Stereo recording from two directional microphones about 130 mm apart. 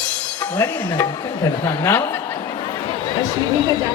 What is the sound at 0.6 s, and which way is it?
A woman's voice, 20° left (ahead or behind).